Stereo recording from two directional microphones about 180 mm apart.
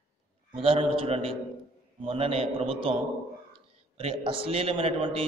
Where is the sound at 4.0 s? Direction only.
30° right (ahead or behind).